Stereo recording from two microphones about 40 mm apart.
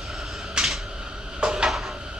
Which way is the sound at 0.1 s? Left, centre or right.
Centre.